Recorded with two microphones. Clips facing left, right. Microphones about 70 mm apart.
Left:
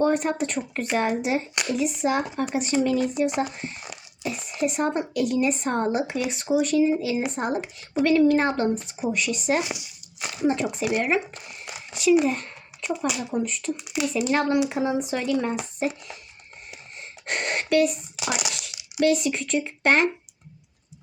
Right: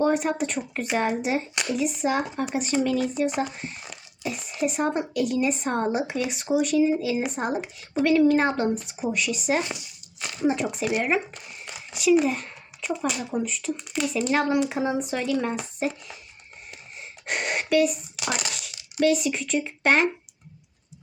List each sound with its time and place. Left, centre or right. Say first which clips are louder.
0.0 s speech: left 1 dB; centre
9.6 s crumpling: left 1 dB; centre
10.4 s speech: left 1 dB; centre
11.4 s a sound: left 1 dB; centre
12.1 s speech: even; centre
13.7 s speech: left 1 dB; centre
17.0 s a sound: even; centre
18.6 s speech: even; centre